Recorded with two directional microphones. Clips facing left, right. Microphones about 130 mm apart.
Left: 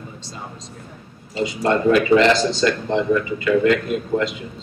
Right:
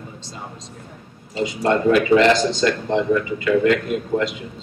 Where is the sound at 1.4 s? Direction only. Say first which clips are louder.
Even; 15° right (ahead or behind).